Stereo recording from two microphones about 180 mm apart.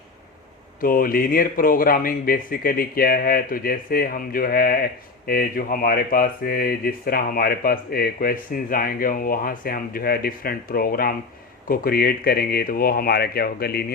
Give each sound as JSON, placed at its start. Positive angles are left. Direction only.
{"t": 0.8, "sound": "speech", "side_deg": 50}